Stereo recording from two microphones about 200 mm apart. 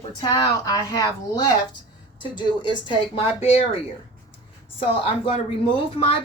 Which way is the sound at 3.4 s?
30° left (ahead or behind).